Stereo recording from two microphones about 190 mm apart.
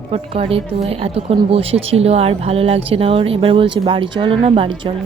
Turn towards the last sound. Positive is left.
turn(degrees=-25)  # may be behind; listen again after turning